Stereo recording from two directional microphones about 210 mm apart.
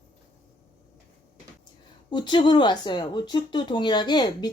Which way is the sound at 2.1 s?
20° left (ahead or behind).